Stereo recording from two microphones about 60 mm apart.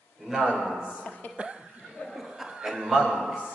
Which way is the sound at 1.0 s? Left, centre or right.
Left.